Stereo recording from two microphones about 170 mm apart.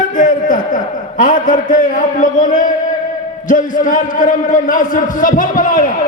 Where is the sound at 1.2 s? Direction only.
50° left (ahead or behind).